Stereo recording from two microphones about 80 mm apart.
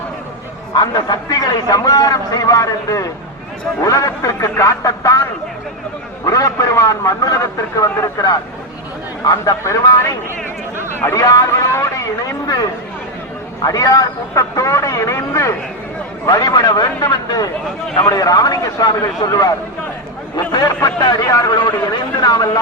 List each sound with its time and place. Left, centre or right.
0.7 s a man's voice: left
11.2 s a man's voice: left
11.4 s a sound: left
13.6 s a man's voice: left
16.2 s a man's voice: left